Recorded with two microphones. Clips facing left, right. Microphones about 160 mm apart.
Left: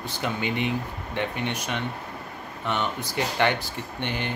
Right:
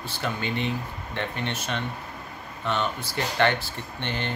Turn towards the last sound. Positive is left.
turn(degrees=10)  # may be behind; listen again after turning